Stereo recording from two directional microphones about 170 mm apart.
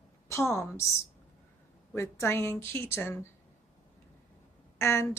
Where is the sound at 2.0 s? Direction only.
15° left (ahead or behind).